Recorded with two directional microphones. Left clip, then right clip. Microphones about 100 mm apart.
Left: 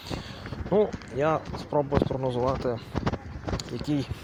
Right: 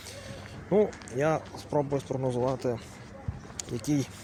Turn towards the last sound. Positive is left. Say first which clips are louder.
# left 1 dB
turn(degrees=-30)  # may be behind; listen again after turning